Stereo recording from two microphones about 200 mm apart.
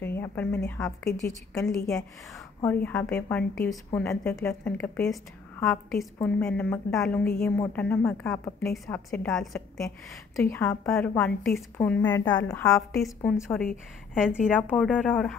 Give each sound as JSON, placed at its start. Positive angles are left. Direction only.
{"t": 0.0, "sound": "a sound", "side_deg": 10}
{"t": 0.7, "sound": "a woman's voice", "side_deg": 0}
{"t": 12.3, "sound": "a woman's voice", "side_deg": 20}
{"t": 13.0, "sound": "a woman's voice", "side_deg": 0}
{"t": 14.1, "sound": "a woman's voice", "side_deg": -5}